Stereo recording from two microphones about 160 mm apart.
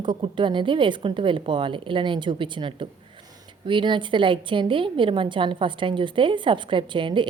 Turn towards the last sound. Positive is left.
turn(degrees=-30)  # may be behind; listen again after turning